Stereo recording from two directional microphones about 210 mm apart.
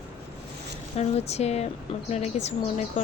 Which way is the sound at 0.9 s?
30° left (ahead or behind).